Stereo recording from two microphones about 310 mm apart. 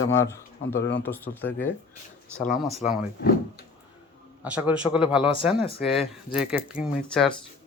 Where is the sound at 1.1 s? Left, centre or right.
Centre.